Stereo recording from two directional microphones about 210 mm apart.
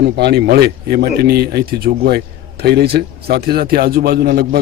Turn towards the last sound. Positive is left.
turn(degrees=-45)  # may be behind; listen again after turning